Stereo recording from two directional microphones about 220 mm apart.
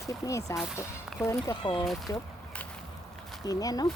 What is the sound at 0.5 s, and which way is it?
Speech, centre (ahead or behind).